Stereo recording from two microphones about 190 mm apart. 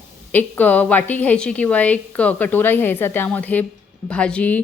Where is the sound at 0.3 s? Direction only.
10° left (ahead or behind).